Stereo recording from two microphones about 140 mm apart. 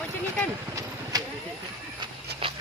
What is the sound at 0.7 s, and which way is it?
Vehicle, 25° right (ahead or behind).